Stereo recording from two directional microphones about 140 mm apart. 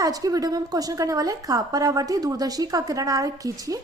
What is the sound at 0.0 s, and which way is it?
A woman's voice, 25° right (ahead or behind).